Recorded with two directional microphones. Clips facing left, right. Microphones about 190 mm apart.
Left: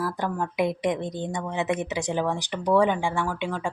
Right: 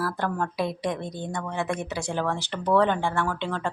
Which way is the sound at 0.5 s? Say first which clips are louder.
Left 3 dB; 20° left (ahead or behind).